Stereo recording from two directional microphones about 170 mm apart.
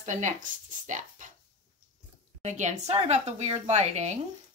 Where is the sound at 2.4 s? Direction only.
45° right (ahead or behind).